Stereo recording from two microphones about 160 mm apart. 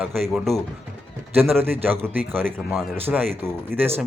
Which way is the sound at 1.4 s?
10° right (ahead or behind).